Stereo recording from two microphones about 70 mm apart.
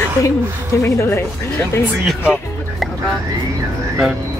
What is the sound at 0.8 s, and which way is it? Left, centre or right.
Speech, left.